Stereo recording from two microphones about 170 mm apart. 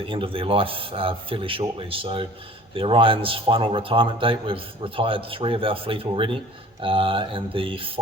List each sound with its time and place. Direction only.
0.0 s a man's voice: 30° right (ahead or behind)